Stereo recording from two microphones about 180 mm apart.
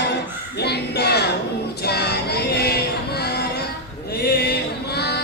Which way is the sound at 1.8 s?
65° left (ahead or behind).